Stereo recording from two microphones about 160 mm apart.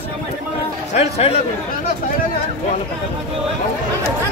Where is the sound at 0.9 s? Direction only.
40° left (ahead or behind).